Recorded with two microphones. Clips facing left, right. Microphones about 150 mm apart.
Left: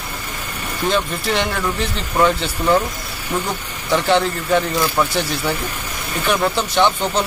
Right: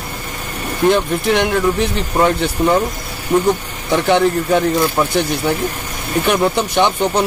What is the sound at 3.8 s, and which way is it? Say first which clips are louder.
Speech: right 3 dB; 15° right (ahead or behind).